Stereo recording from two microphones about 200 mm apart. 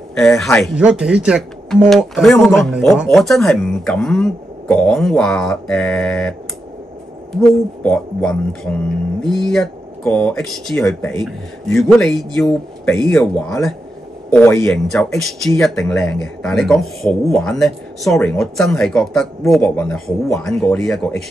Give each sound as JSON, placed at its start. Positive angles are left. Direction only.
{"t": 0.1, "sound": "speech", "side_deg": 0}
{"t": 7.4, "sound": "speech", "side_deg": 5}
{"t": 14.3, "sound": "speech", "side_deg": 10}
{"t": 14.7, "sound": "speech", "side_deg": 0}